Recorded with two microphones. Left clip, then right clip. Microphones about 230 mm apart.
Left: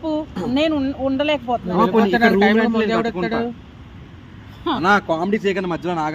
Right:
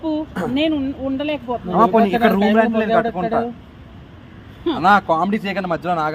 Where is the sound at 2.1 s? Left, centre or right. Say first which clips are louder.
Left 1 dB; left.